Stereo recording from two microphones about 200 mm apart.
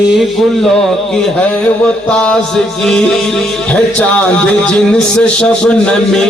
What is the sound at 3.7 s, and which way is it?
A man's voice, 5° left (ahead or behind).